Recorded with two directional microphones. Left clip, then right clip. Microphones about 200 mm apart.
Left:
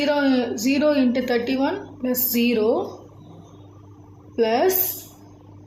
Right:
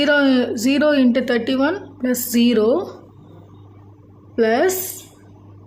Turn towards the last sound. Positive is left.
turn(degrees=-50)  # may be behind; listen again after turning